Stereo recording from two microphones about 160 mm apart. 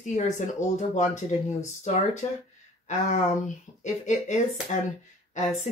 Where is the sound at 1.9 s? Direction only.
50° left (ahead or behind).